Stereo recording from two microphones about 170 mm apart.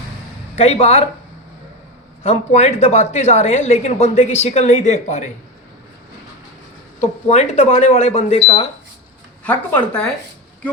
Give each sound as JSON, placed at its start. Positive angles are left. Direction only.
{"t": 0.5, "sound": "a woman's voice", "side_deg": 40}
{"t": 2.2, "sound": "a woman's voice", "side_deg": 40}
{"t": 7.0, "sound": "a woman's voice", "side_deg": 40}
{"t": 9.4, "sound": "speech", "side_deg": 10}